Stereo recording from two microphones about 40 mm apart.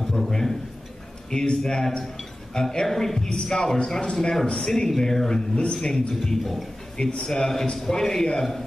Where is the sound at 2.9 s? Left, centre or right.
Centre.